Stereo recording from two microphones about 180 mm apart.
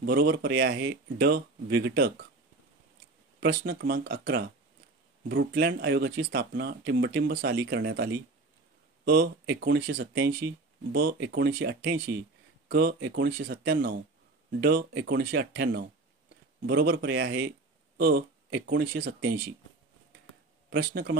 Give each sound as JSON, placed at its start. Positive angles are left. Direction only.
{"t": 0.0, "sound": "speech", "side_deg": -60}
{"t": 3.3, "sound": "speech", "side_deg": -60}
{"t": 12.6, "sound": "speech", "side_deg": -70}
{"t": 17.9, "sound": "speech", "side_deg": -60}
{"t": 20.7, "sound": "speech", "side_deg": -60}